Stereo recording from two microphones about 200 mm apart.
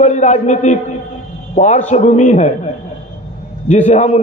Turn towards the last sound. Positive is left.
turn(degrees=35)  # may be behind; listen again after turning